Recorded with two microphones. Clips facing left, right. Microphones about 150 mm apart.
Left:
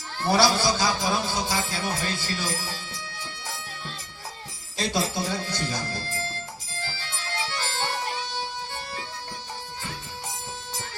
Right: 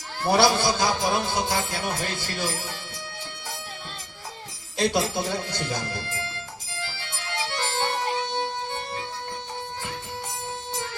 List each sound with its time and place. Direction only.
0.3 s music: 55° right (ahead or behind)
4.8 s music: 55° right (ahead or behind)